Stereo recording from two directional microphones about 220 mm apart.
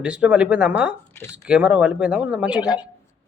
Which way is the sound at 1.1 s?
10° left (ahead or behind).